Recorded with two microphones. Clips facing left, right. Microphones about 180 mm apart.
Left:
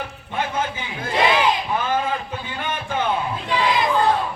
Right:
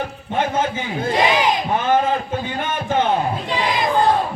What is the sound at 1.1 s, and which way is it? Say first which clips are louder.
Battle cry: right 1 dB; 15° right (ahead or behind).